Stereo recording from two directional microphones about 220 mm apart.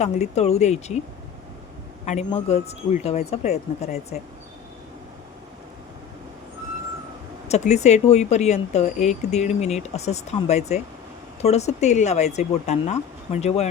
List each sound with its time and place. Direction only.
0.0 s speech: 30° left (ahead or behind)
2.0 s speech: 30° left (ahead or behind)
7.4 s speech: 30° left (ahead or behind)